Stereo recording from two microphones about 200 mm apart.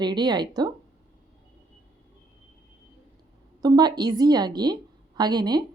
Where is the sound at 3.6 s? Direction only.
20° right (ahead or behind).